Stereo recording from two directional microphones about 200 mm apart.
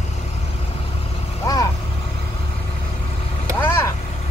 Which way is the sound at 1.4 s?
15° left (ahead or behind).